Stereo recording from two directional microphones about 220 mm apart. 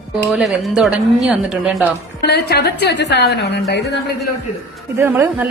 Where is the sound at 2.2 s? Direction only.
50° left (ahead or behind).